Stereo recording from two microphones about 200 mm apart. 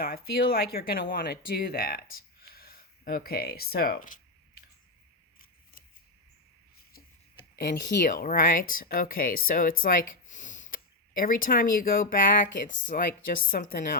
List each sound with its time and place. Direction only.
0.0 s speech: 50° left (ahead or behind)
7.5 s speech: 50° left (ahead or behind)